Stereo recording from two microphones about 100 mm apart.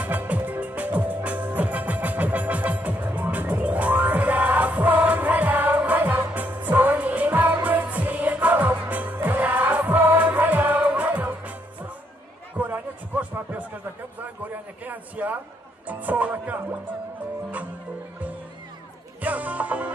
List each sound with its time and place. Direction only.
0.0 s music: 15° right (ahead or behind)
12.5 s a sound: 20° right (ahead or behind)
15.9 s music: 15° right (ahead or behind)
19.2 s music: 15° right (ahead or behind)